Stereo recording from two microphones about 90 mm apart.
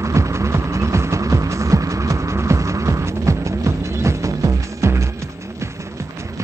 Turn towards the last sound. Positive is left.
turn(degrees=-30)  # may be behind; listen again after turning